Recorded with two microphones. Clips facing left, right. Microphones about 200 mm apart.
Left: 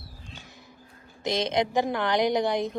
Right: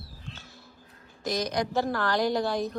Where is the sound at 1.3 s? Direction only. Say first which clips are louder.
Left 3 dB; 25° left (ahead or behind).